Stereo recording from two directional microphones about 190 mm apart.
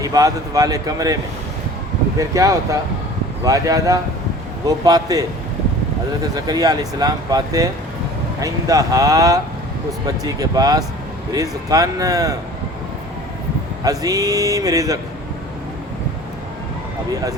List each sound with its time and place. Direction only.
0.0 s speech: 20° right (ahead or behind)
6.2 s speech: 20° right (ahead or behind)
13.8 s speech: 20° right (ahead or behind)